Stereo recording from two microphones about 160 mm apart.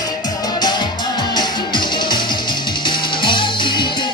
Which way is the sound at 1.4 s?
30° left (ahead or behind).